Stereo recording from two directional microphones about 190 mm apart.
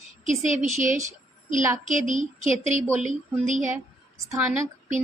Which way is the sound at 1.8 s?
40° right (ahead or behind).